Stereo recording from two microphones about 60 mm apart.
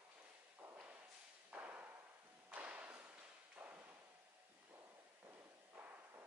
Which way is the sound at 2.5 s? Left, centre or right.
Right.